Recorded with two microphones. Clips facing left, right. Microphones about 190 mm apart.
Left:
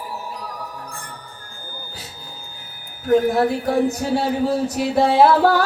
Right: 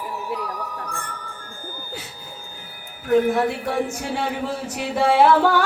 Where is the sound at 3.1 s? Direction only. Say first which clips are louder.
Left 2 dB; 40° left (ahead or behind).